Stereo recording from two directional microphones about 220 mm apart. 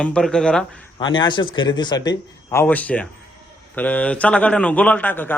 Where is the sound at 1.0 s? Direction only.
20° left (ahead or behind).